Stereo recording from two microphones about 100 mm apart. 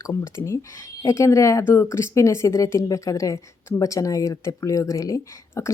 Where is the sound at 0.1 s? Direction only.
30° left (ahead or behind).